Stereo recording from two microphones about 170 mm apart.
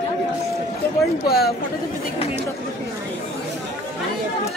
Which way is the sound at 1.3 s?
65° left (ahead or behind).